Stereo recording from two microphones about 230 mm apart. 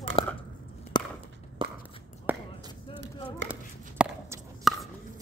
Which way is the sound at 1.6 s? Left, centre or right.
Right.